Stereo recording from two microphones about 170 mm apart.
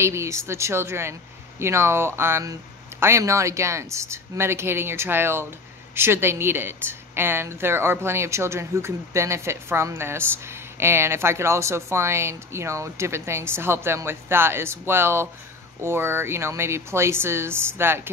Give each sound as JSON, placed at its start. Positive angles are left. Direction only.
{"t": 0.0, "sound": "a woman's voice", "side_deg": -15}